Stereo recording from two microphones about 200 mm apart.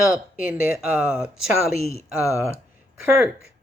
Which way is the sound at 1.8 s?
15° left (ahead or behind).